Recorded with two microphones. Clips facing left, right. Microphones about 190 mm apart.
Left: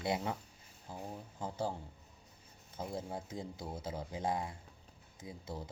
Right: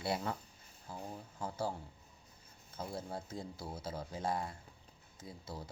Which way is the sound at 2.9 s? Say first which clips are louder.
Left 1 dB; 15° left (ahead or behind).